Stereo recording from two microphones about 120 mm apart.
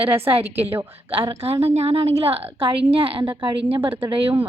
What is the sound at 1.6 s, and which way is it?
A woman's voice, 60° right (ahead or behind).